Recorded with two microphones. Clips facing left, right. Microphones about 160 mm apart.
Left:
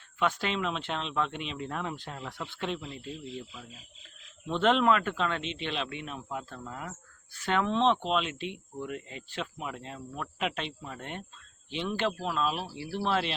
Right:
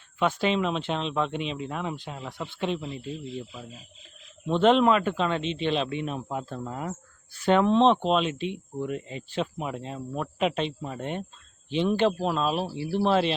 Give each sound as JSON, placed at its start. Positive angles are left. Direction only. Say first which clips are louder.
{"t": 0.2, "sound": "speech", "louder": "right 5 dB", "side_deg": -25}
{"t": 2.5, "sound": "speech", "louder": "right 7 dB", "side_deg": -20}
{"t": 4.4, "sound": "speech", "louder": "right 5 dB", "side_deg": -20}